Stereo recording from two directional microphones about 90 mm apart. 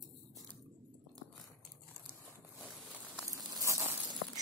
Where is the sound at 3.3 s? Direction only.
40° right (ahead or behind).